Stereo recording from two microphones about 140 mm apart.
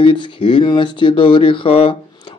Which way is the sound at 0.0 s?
40° left (ahead or behind).